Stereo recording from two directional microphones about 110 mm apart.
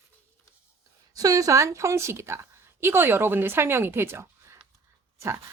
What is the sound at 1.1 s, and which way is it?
A woman's voice, 35° right (ahead or behind).